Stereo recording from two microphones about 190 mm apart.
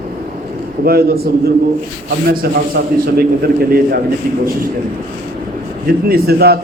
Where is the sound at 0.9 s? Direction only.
55° right (ahead or behind).